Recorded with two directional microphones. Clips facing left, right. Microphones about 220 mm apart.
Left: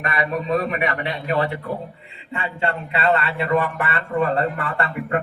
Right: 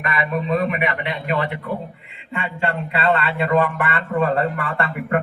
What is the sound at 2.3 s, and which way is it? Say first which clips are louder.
Speech: right 1 dB; 25° left (ahead or behind).